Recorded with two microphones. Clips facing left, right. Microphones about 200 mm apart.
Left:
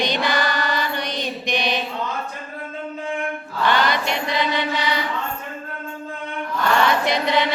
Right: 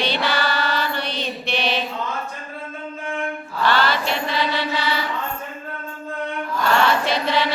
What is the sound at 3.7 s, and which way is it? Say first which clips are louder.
Mantra: even; 15° left (ahead or behind).